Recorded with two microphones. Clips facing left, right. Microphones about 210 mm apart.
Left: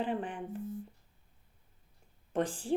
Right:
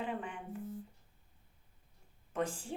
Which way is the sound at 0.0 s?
30° left (ahead or behind).